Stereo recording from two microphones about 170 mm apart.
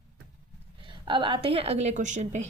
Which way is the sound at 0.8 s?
30° right (ahead or behind).